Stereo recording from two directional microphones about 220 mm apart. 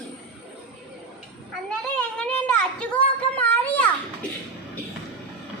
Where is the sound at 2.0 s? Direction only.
5° left (ahead or behind).